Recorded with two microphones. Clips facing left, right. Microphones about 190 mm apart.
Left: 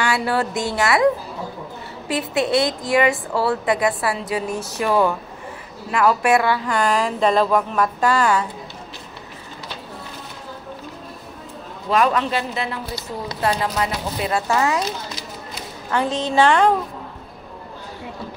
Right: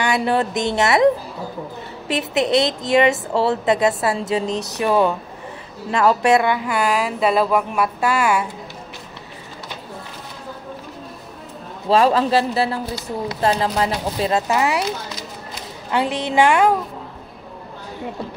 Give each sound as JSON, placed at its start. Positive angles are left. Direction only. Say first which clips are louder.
{"t": 0.0, "sound": "a woman's voice", "louder": "right 2 dB", "side_deg": -20}
{"t": 11.9, "sound": "a man's voice", "louder": "right 4 dB", "side_deg": -30}
{"t": 14.5, "sound": "a woman's voice", "louder": "right 1 dB", "side_deg": -15}
{"t": 15.9, "sound": "a woman's voice", "louder": "right 1 dB", "side_deg": -15}